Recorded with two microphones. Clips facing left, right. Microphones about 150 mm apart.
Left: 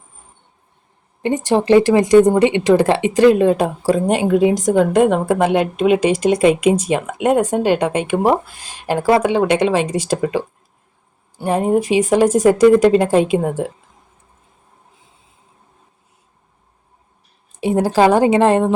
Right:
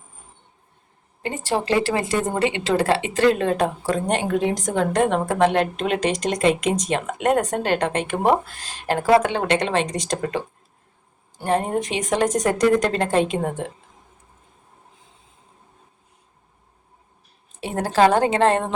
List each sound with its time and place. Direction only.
1.2 s a woman's voice: 20° left (ahead or behind)
11.4 s a woman's voice: 10° left (ahead or behind)
17.5 s a woman's voice: 10° left (ahead or behind)